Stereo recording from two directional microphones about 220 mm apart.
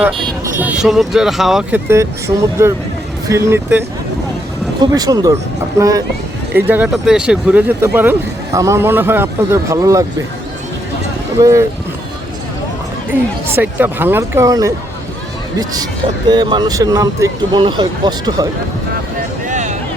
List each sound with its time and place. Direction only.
0.6 s speech: 5° right (ahead or behind)
11.3 s speech: 15° right (ahead or behind)
13.6 s speech: 10° right (ahead or behind)
19.5 s a sound: 35° right (ahead or behind)